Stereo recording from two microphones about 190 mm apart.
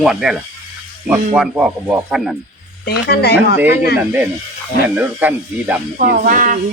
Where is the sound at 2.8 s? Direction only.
55° left (ahead or behind).